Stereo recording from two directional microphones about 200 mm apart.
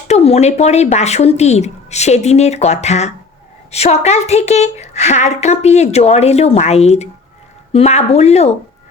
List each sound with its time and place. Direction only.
0.1 s a woman's voice: 30° left (ahead or behind)